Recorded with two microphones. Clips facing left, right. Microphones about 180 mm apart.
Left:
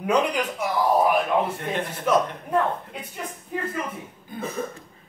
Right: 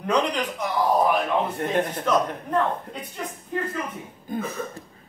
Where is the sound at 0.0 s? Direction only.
10° left (ahead or behind).